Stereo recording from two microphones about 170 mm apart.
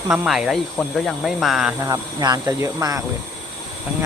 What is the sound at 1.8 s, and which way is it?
Speech, 25° right (ahead or behind).